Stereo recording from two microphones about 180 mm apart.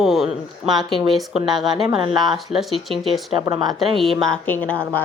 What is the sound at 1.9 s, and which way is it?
Speech, 25° right (ahead or behind).